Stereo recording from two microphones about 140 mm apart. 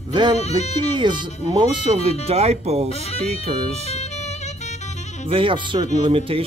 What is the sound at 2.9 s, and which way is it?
Speech, 45° left (ahead or behind).